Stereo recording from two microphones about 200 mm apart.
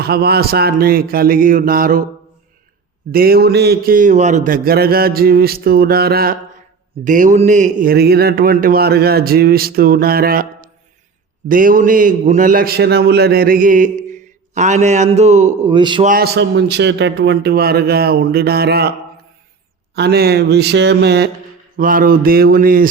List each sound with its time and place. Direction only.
0.0 s a man's voice: 50° right (ahead or behind)
3.1 s a man's voice: 50° right (ahead or behind)
7.0 s a man's voice: 40° right (ahead or behind)
11.4 s a man's voice: 45° right (ahead or behind)
15.6 s a man's voice: 25° right (ahead or behind)
16.0 s a man's voice: 50° right (ahead or behind)
20.0 s speech: 50° right (ahead or behind)
21.8 s a man's voice: 45° right (ahead or behind)